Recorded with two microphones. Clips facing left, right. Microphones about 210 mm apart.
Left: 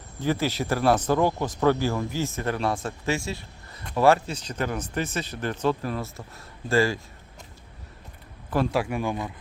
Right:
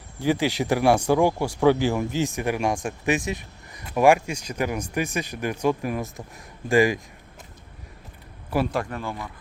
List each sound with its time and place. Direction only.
0.2 s speech: 15° right (ahead or behind)
8.4 s speech: 5° right (ahead or behind)
8.8 s speech: 10° left (ahead or behind)